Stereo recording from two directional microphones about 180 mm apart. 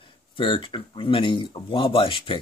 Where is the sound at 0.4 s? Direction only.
30° left (ahead or behind).